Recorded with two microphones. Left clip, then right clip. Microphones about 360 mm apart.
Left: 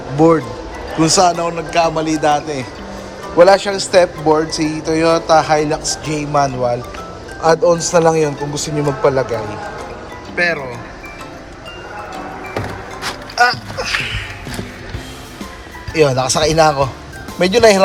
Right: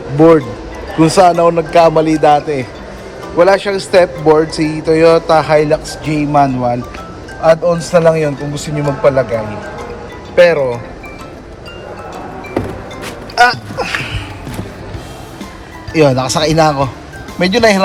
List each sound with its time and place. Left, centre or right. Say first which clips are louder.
0.2 s a man's voice: right 4 dB; centre
10.3 s speech: right 9 dB; centre
13.3 s a sound: right 4 dB; right
15.9 s a man's voice: right 2 dB; centre